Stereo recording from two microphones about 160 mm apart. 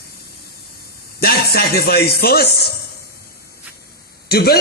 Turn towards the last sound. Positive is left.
turn(degrees=75)  # may be behind; listen again after turning